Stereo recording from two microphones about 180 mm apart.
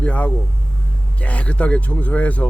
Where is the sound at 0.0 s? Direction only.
10° left (ahead or behind).